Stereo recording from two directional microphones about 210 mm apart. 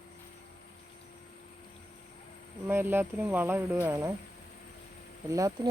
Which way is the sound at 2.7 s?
10° right (ahead or behind).